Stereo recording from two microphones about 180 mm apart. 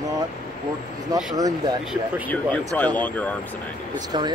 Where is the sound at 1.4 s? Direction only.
20° right (ahead or behind).